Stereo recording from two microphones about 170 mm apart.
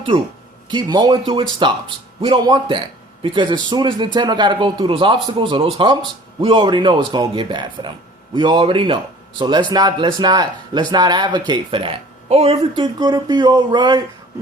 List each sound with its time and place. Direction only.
0.7 s speech: 25° right (ahead or behind)